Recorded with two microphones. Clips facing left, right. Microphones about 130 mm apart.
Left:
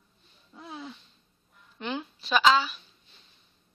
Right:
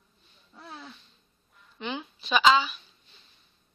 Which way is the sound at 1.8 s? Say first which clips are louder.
Left 1 dB; centre (ahead or behind).